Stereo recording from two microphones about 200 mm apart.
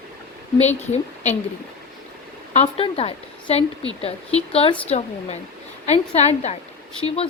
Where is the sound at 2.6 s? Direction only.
30° left (ahead or behind).